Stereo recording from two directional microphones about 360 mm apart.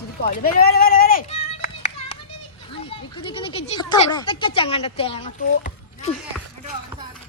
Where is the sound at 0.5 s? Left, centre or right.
Left.